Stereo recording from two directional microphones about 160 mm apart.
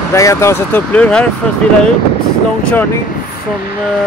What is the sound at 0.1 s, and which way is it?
Speech, 20° left (ahead or behind).